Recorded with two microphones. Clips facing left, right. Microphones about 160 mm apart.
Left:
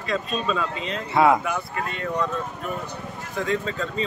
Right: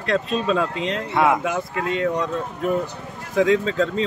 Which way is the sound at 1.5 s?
90° right.